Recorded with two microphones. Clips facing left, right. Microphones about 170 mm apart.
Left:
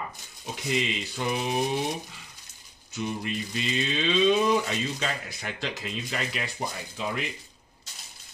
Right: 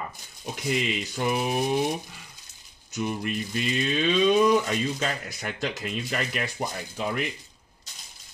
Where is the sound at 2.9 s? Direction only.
50° right (ahead or behind).